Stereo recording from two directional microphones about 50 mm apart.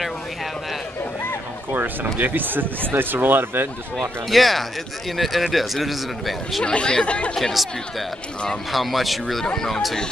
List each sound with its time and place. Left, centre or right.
2.1 s speech: right
4.3 s speech: centre
6.6 s speech: centre
7.3 s speech: centre